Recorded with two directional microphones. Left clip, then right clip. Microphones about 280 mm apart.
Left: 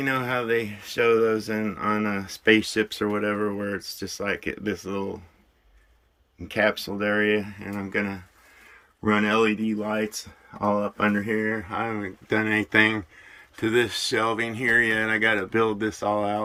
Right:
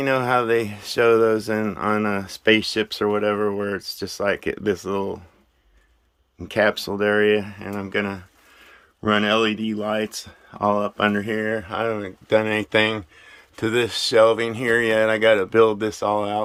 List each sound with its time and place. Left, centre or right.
0.0 s speech: centre
6.4 s speech: centre